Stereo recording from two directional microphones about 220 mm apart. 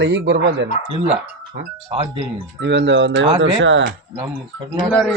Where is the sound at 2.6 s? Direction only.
55° right (ahead or behind).